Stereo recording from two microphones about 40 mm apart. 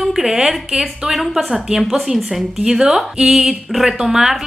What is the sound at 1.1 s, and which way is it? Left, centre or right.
Speech, centre.